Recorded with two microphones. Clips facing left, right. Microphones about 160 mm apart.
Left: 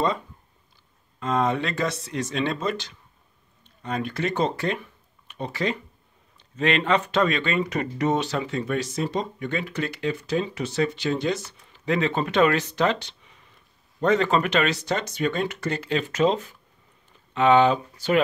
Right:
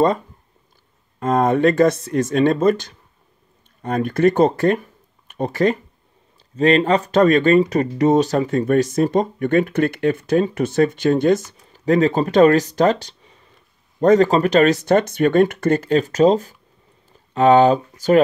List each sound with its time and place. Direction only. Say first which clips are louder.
1.2 s speech: right 8 dB; 50° right (ahead or behind)
6.5 s speech: right 7 dB; 35° right (ahead or behind)